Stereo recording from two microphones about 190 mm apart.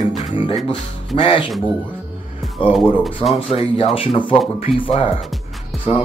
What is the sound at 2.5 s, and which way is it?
Music, centre (ahead or behind).